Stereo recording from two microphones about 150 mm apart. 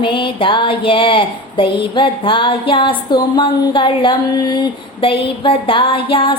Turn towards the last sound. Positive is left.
turn(degrees=35)  # may be behind; listen again after turning